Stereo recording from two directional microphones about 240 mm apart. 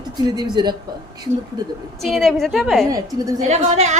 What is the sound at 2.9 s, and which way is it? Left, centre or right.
Speech, centre.